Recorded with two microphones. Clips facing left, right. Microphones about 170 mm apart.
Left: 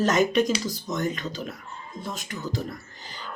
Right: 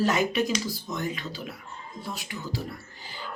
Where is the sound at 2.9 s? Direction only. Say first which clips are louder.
Left 1 dB; 45° left (ahead or behind).